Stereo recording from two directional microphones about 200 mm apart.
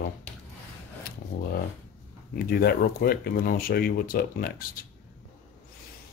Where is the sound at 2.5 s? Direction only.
50° left (ahead or behind).